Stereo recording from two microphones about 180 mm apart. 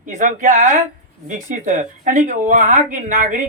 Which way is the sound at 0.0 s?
45° right (ahead or behind).